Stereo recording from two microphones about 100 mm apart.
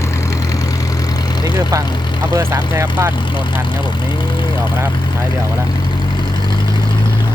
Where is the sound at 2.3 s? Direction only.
25° right (ahead or behind).